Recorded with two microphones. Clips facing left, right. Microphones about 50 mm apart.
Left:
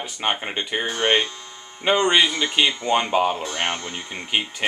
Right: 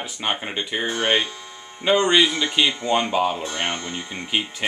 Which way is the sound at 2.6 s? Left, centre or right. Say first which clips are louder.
Even; centre.